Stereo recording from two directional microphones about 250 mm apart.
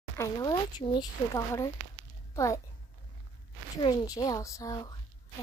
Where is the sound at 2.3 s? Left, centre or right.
Centre.